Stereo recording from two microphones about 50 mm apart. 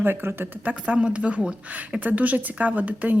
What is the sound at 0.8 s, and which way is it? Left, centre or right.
Speech, right.